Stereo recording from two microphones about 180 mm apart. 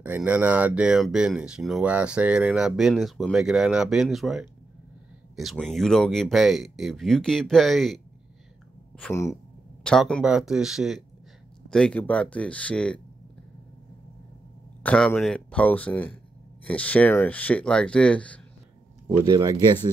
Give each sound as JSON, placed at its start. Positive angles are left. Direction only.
{"t": 0.0, "sound": "speech", "side_deg": -10}
{"t": 9.1, "sound": "speech", "side_deg": 15}
{"t": 9.8, "sound": "speech", "side_deg": 5}
{"t": 14.8, "sound": "speech", "side_deg": 5}
{"t": 19.0, "sound": "speech", "side_deg": -20}